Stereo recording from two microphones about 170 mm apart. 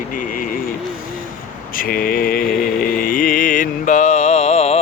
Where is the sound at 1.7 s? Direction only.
55° left (ahead or behind).